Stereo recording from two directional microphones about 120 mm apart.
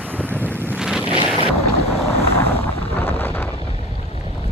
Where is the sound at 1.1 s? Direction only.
50° right (ahead or behind).